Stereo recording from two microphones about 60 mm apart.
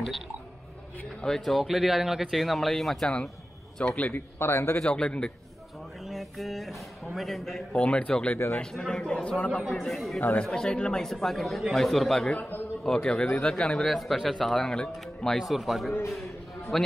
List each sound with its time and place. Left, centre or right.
1.2 s speech: centre
3.7 s speech: centre
4.1 s speech: left
4.8 s speech: centre
6.0 s speech: centre
7.7 s speech: centre
9.7 s speech: centre
10.4 s speech: centre
11.1 s speech: centre
12.3 s a man's voice: left
12.8 s speech: centre